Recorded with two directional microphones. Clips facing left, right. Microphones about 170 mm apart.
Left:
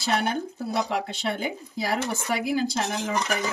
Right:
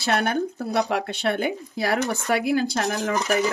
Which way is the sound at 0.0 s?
65° right (ahead or behind).